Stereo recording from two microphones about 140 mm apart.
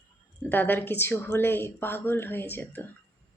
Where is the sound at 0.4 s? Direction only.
15° left (ahead or behind).